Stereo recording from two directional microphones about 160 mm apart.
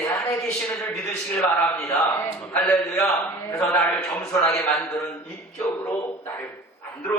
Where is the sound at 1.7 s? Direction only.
15° left (ahead or behind).